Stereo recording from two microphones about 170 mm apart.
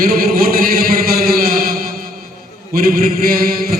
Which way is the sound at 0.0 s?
60° right (ahead or behind).